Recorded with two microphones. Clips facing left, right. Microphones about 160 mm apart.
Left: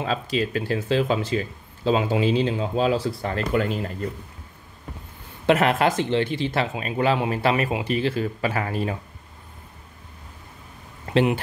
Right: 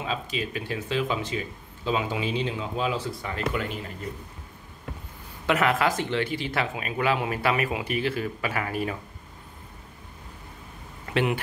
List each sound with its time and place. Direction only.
0.0 s speech: 40° left (ahead or behind)
5.5 s speech: 30° left (ahead or behind)
11.1 s speech: 25° left (ahead or behind)